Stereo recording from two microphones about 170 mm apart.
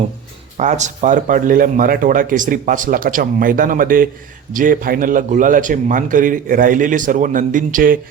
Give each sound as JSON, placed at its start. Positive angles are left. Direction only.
{"t": 0.5, "sound": "speech", "side_deg": -45}